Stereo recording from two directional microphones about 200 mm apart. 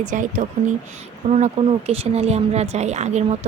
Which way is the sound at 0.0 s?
40° right (ahead or behind).